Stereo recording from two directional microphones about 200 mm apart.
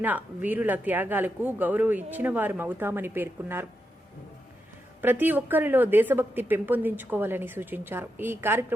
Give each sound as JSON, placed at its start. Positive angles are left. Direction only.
{"t": 0.0, "sound": "speech", "side_deg": -10}
{"t": 4.9, "sound": "speech", "side_deg": -10}